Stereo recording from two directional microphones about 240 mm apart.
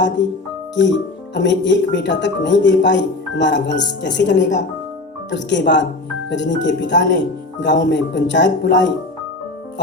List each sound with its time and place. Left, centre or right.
1.3 s speech: left